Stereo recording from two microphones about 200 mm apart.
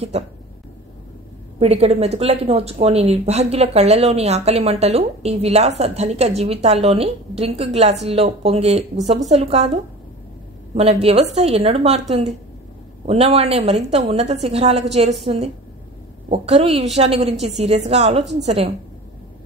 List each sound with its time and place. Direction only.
0.1 s speech: 35° right (ahead or behind)
1.6 s speech: 30° right (ahead or behind)
10.7 s speech: 30° right (ahead or behind)